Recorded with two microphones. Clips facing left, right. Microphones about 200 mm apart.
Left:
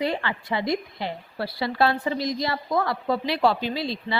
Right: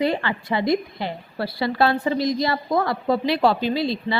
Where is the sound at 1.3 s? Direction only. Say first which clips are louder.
Right 4 dB; 55° right (ahead or behind).